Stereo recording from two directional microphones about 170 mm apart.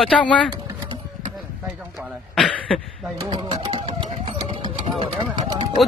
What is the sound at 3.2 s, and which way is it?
Music, 30° right (ahead or behind).